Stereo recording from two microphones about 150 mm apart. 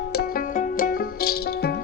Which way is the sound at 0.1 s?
70° left (ahead or behind).